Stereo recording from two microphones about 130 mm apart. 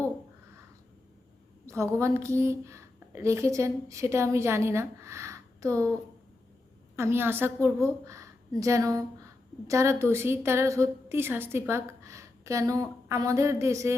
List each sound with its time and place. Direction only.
1.6 s a woman's voice: 20° right (ahead or behind)
6.9 s a woman's voice: 20° right (ahead or behind)